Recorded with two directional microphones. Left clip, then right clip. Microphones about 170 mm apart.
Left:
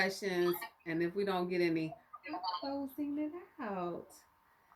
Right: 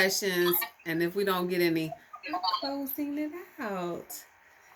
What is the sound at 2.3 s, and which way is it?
Speech, 35° right (ahead or behind).